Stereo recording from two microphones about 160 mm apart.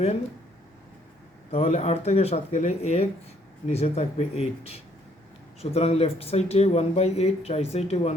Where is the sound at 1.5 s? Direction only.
40° left (ahead or behind).